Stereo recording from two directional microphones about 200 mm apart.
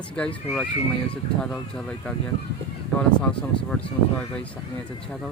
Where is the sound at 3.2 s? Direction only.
5° left (ahead or behind).